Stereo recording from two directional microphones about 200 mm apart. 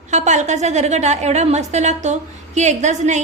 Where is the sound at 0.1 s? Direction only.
35° right (ahead or behind).